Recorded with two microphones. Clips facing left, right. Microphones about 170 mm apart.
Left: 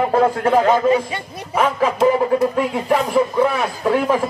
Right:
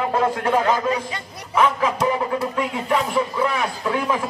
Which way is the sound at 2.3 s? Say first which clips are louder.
Left 6 dB; 35° left (ahead or behind).